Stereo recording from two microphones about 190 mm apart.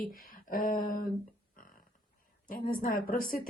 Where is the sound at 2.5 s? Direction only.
50° left (ahead or behind).